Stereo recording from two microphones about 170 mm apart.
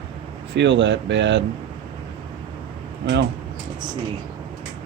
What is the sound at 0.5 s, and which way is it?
Speech, 90° right.